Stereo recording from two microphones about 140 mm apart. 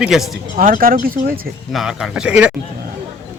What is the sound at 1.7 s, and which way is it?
Speech, centre (ahead or behind).